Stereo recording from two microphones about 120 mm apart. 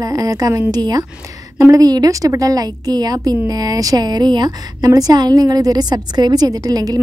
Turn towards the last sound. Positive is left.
turn(degrees=-30)  # may be behind; listen again after turning